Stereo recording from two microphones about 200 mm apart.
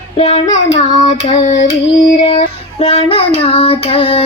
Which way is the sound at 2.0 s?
25° left (ahead or behind).